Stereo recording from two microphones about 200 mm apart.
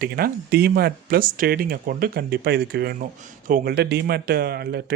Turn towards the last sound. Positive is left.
turn(degrees=-50)  # may be behind; listen again after turning